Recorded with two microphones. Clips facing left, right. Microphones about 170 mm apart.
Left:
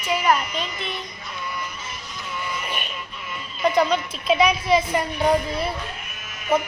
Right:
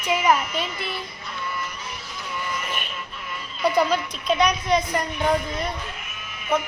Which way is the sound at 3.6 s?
5° right (ahead or behind).